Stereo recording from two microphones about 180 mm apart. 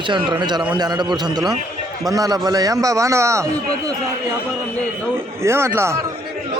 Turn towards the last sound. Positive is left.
turn(degrees=-15)  # may be behind; listen again after turning